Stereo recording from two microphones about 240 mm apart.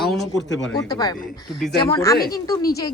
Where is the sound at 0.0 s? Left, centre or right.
Centre.